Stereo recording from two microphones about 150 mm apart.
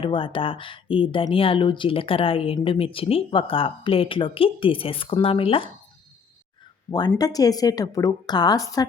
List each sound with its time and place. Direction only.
0.0 s speech: 35° left (ahead or behind)
7.1 s a woman's voice: 25° left (ahead or behind)